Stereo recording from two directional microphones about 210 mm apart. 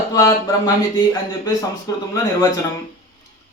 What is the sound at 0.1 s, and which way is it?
Speech, 15° left (ahead or behind).